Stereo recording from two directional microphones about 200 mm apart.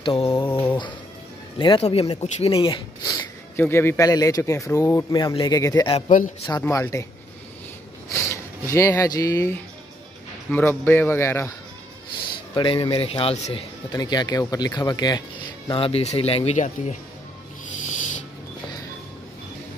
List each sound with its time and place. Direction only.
0.0 s mantra: 25° left (ahead or behind)
1.6 s speech: 25° left (ahead or behind)
5.9 s speech: 40° left (ahead or behind)
6.4 s a man's voice: 15° left (ahead or behind)
8.1 s a man's voice: 15° left (ahead or behind)
12.5 s speech: 25° left (ahead or behind)